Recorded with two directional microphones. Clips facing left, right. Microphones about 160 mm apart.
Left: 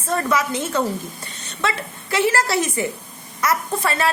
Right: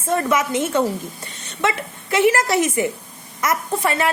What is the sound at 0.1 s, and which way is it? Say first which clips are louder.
A woman's voice: right 2 dB; 20° right (ahead or behind).